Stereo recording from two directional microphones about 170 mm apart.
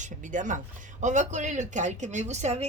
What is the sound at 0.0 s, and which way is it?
Speech, 50° right (ahead or behind).